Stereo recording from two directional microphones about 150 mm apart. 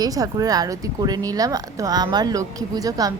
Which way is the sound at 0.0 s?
25° right (ahead or behind).